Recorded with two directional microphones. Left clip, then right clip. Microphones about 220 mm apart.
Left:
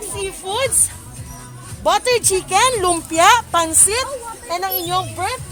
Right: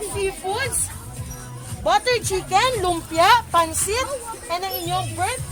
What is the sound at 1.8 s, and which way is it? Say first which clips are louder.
A woman's voice: left 3 dB; 40° left (ahead or behind).